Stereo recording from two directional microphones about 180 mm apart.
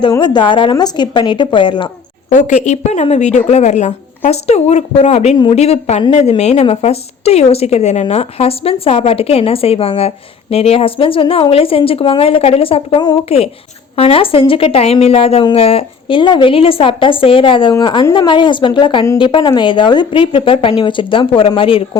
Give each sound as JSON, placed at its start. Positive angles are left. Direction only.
{"t": 0.1, "sound": "a woman's voice", "side_deg": 25}
{"t": 2.3, "sound": "a woman's voice", "side_deg": 40}